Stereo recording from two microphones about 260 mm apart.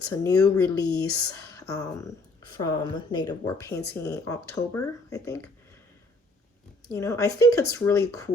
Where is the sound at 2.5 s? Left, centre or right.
Centre.